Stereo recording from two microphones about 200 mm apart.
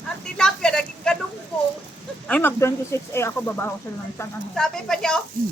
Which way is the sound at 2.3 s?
10° left (ahead or behind).